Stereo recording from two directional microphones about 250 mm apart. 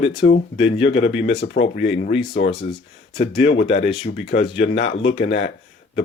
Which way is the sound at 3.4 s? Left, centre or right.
Left.